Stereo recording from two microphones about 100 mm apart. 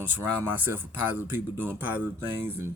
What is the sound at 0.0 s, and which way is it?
A man's voice, 20° right (ahead or behind).